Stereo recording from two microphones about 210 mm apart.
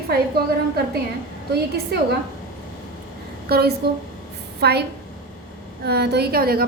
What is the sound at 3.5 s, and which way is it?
A woman's voice, 50° right (ahead or behind).